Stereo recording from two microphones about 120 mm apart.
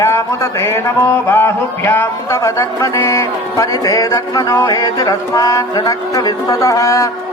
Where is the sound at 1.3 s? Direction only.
20° left (ahead or behind).